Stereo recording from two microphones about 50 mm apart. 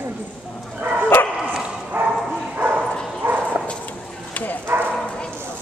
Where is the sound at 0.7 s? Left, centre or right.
Right.